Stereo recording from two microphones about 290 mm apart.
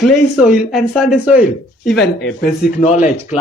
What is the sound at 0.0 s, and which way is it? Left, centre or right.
Speech, centre.